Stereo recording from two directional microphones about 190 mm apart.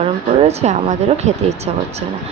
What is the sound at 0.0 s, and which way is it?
Speech, 35° right (ahead or behind).